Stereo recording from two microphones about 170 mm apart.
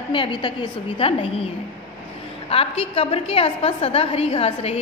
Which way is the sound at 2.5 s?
35° left (ahead or behind).